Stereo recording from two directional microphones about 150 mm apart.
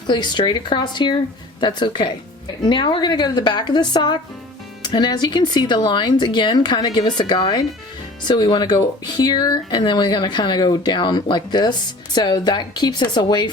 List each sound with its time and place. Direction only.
0.1 s speech: 30° left (ahead or behind)